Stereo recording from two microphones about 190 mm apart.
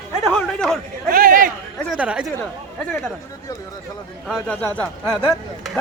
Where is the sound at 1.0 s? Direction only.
50° right (ahead or behind).